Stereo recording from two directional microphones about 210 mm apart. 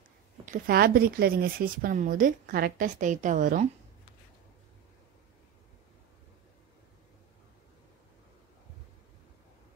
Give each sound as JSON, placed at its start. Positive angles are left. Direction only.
{"t": 0.5, "sound": "speech", "side_deg": -45}